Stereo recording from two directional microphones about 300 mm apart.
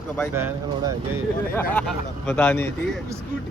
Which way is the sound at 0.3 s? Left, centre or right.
Centre.